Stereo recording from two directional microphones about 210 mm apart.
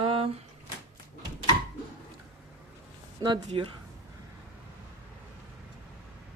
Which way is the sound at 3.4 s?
25° right (ahead or behind).